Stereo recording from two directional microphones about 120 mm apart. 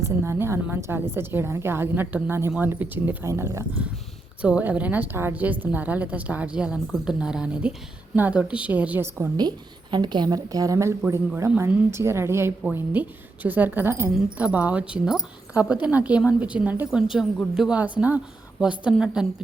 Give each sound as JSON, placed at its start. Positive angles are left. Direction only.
{"t": 0.0, "sound": "a woman's voice", "side_deg": -20}
{"t": 4.4, "sound": "speech", "side_deg": -10}
{"t": 9.4, "sound": "a woman's voice", "side_deg": -35}